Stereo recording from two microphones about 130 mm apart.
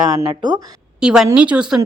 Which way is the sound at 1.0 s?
5° right (ahead or behind).